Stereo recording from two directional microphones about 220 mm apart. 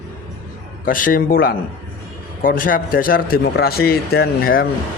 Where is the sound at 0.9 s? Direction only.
40° left (ahead or behind).